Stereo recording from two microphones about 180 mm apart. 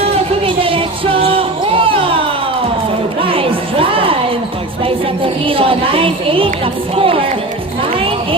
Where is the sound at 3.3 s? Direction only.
30° right (ahead or behind).